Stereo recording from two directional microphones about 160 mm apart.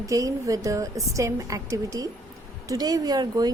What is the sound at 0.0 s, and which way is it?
A woman's voice, 20° right (ahead or behind).